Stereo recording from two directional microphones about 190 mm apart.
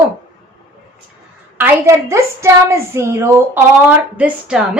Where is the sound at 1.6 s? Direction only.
15° right (ahead or behind).